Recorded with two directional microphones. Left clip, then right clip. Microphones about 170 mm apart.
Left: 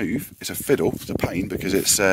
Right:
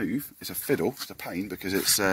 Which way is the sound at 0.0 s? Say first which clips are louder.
Left 5 dB; 65° left (ahead or behind).